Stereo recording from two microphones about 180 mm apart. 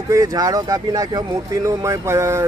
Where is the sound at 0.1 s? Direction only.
20° right (ahead or behind).